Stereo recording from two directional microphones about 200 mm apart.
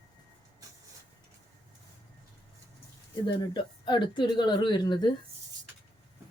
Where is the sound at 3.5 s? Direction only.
25° left (ahead or behind).